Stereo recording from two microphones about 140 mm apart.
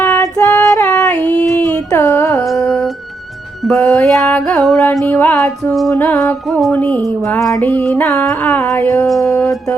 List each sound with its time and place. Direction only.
0.0 s female singing: 10° left (ahead or behind)
0.3 s music: 20° left (ahead or behind)
1.5 s a sound: 25° left (ahead or behind)
1.9 s music: 20° left (ahead or behind)
2.6 s music: centre (ahead or behind)
5.9 s music: 20° left (ahead or behind)
7.2 s music: 20° left (ahead or behind)
9.0 s music: centre (ahead or behind)